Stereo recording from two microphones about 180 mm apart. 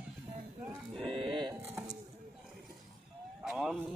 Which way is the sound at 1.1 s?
30° right (ahead or behind).